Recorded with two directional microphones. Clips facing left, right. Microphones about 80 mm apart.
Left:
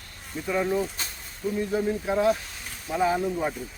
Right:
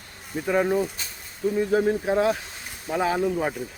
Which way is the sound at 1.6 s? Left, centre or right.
Right.